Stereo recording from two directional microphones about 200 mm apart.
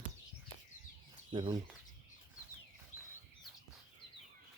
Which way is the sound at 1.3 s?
25° right (ahead or behind).